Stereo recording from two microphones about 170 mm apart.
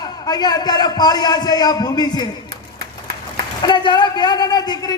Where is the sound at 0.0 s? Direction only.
25° left (ahead or behind).